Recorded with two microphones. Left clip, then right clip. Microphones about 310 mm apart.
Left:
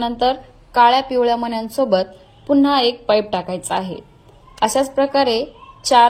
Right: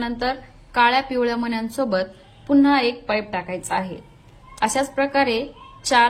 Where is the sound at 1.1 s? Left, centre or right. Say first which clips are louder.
Left 6 dB; left.